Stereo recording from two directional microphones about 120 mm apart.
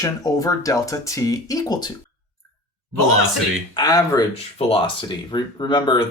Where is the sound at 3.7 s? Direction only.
35° left (ahead or behind).